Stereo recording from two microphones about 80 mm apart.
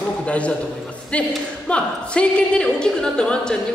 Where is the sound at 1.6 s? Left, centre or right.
Centre.